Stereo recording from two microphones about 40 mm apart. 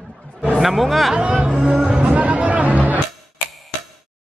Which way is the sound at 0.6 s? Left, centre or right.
Centre.